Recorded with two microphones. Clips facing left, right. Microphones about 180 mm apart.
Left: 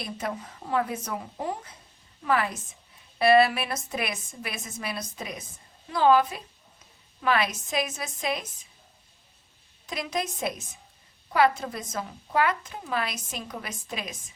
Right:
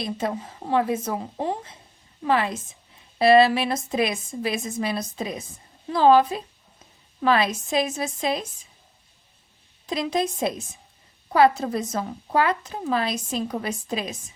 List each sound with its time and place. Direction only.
0.0 s a woman's voice: 25° right (ahead or behind)
9.9 s a woman's voice: 25° right (ahead or behind)